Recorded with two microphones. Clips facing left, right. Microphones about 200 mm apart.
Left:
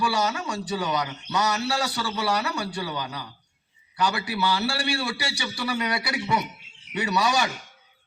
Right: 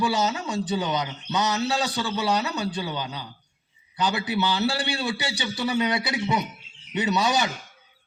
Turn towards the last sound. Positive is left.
turn(degrees=-20)  # may be behind; listen again after turning